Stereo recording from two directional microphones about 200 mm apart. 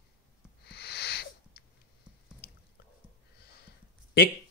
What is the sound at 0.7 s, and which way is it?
Owl, 55° left (ahead or behind).